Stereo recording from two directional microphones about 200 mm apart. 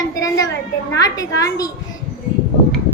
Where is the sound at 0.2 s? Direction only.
15° left (ahead or behind).